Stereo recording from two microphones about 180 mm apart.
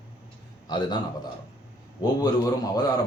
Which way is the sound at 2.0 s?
20° left (ahead or behind).